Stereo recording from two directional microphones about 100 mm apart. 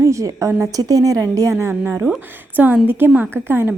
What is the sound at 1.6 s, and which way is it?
A woman's voice, 20° right (ahead or behind).